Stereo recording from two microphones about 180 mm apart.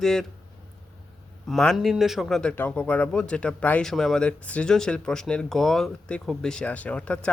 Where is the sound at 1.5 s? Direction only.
Centre (ahead or behind).